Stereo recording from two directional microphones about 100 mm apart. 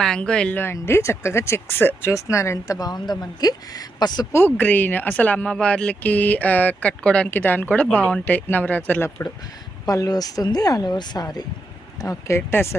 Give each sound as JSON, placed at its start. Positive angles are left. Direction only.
{"t": 0.0, "sound": "speech", "side_deg": 10}
{"t": 0.6, "sound": "speech", "side_deg": 25}
{"t": 4.3, "sound": "speech", "side_deg": 25}
{"t": 9.8, "sound": "speech", "side_deg": 35}
{"t": 12.0, "sound": "speech", "side_deg": 25}